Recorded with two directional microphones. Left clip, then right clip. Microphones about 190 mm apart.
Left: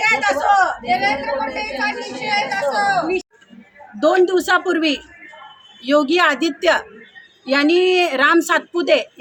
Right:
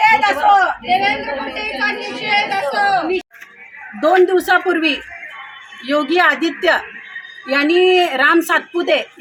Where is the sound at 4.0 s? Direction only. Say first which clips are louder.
Right 2 dB; 25° left (ahead or behind).